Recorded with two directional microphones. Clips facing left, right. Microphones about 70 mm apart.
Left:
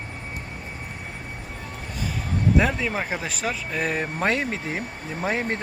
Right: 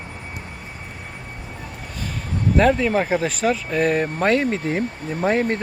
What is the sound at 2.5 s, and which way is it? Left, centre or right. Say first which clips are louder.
Speech: right 8 dB; centre.